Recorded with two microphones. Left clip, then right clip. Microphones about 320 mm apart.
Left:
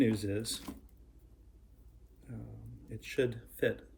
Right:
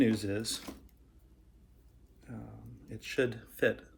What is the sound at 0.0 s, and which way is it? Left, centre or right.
Speech, centre.